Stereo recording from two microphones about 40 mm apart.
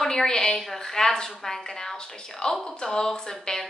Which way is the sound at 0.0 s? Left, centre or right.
Centre.